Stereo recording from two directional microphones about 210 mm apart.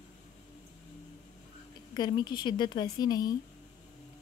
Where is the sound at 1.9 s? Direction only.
20° left (ahead or behind).